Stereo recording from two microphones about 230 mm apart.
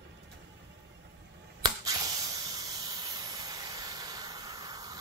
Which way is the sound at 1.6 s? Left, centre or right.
Centre.